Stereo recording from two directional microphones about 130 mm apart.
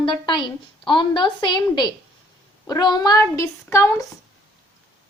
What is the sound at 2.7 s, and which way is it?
Speech, 30° left (ahead or behind).